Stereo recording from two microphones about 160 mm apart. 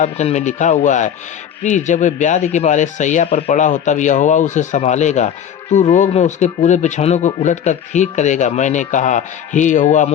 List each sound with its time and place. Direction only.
0.0 s speech: 45° left (ahead or behind)